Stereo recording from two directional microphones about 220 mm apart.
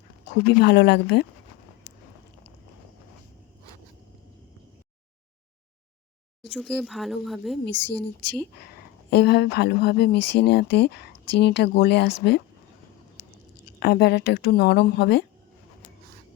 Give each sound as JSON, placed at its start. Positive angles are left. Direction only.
{"t": 0.4, "sound": "speech", "side_deg": 50}
{"t": 6.5, "sound": "speech", "side_deg": 0}
{"t": 7.6, "sound": "speech", "side_deg": 50}
{"t": 13.7, "sound": "speech", "side_deg": 50}